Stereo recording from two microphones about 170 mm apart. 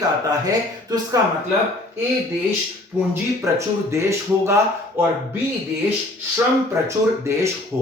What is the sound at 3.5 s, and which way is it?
Speech, 15° right (ahead or behind).